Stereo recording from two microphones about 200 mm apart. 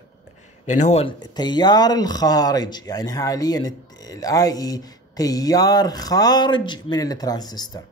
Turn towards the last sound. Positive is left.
turn(degrees=20)  # may be behind; listen again after turning